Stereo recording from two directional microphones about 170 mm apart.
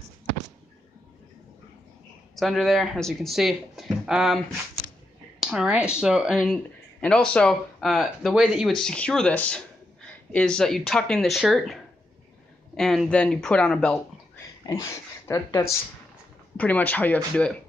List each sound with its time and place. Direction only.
2.3 s speech: centre (ahead or behind)
5.4 s speech: 5° right (ahead or behind)
14.7 s speech: 20° left (ahead or behind)